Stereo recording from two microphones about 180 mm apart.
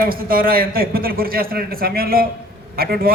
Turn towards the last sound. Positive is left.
turn(degrees=-55)  # may be behind; listen again after turning